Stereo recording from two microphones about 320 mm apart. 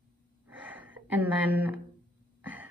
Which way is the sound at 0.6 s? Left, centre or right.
Centre.